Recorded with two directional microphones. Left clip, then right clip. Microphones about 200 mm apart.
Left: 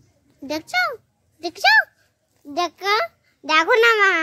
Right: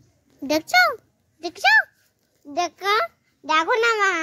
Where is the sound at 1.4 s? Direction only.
5° right (ahead or behind).